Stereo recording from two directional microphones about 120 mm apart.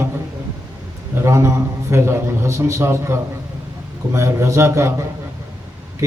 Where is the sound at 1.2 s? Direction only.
25° right (ahead or behind).